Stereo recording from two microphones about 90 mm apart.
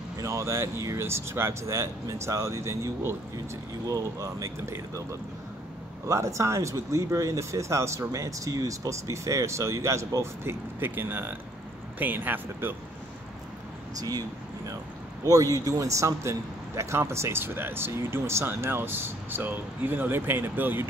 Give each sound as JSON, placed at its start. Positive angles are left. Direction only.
{"t": 0.2, "sound": "speech", "side_deg": -35}
{"t": 6.0, "sound": "speech", "side_deg": -35}
{"t": 15.2, "sound": "speech", "side_deg": -40}